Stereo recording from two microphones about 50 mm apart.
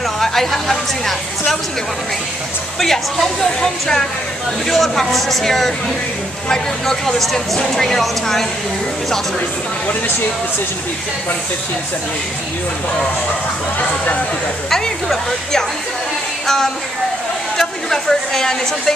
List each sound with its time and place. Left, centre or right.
0.2 s speech: centre
2.8 s speech: centre
13.7 s speech: left
14.7 s speech: centre
17.6 s speech: centre